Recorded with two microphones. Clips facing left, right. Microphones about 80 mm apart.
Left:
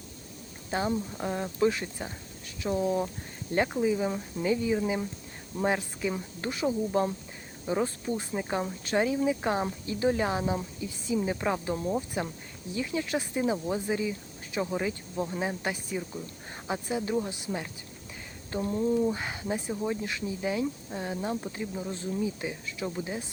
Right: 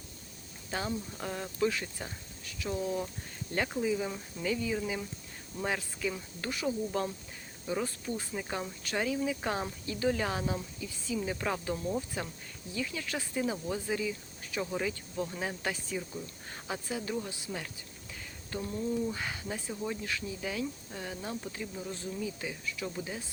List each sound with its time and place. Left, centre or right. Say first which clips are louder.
0.7 s speech: left 6 dB; left
3.7 s speech: left 5 dB; centre
18.5 s speech: left 6 dB; left